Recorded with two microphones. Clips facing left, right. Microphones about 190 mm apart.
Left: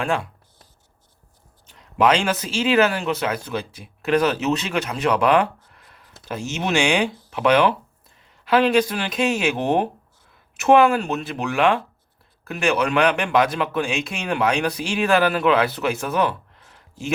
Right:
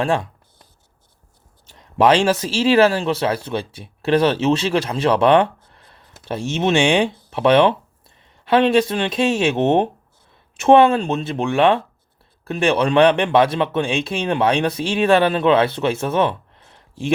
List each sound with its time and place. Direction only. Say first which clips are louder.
1.7 s speech: right 3 dB; 35° right (ahead or behind)